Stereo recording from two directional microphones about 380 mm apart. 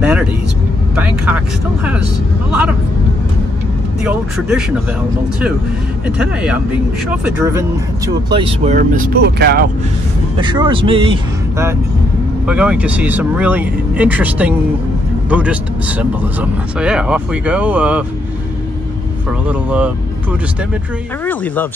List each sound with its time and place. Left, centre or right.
0.0 s vehicle: centre
4.0 s speech: centre
6.0 s speech: centre
8.3 s speech: centre
10.3 s speech: centre
19.4 s speech: centre